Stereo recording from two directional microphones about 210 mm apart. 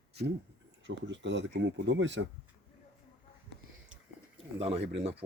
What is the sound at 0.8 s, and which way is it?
Speech, 60° right (ahead or behind).